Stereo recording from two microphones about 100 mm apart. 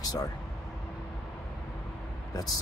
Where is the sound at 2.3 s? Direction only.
40° left (ahead or behind).